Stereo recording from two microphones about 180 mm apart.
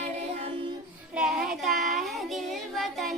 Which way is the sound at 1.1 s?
5° right (ahead or behind).